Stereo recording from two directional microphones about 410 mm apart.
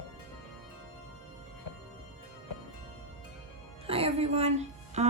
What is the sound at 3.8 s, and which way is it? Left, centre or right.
Music, centre.